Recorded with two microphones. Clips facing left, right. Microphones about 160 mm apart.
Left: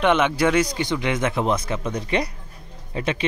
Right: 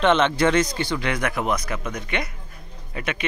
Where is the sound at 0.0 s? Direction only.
10° left (ahead or behind).